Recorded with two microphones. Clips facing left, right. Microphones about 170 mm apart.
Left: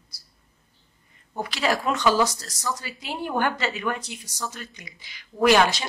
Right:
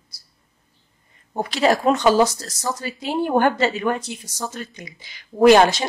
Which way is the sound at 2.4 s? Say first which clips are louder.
Right 4 dB; 40° right (ahead or behind).